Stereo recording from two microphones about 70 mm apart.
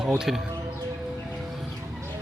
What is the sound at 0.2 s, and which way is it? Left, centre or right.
Speech, centre.